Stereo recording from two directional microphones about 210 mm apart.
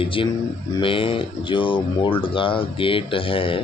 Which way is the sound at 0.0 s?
25° left (ahead or behind).